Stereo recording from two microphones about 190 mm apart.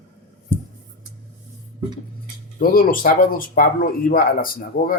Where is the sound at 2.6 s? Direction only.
50° left (ahead or behind).